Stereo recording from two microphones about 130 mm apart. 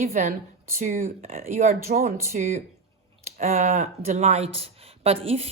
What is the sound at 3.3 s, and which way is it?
A woman's voice, 65° right (ahead or behind).